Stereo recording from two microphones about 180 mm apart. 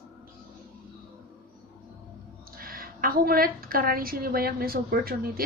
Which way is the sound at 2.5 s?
55° right (ahead or behind).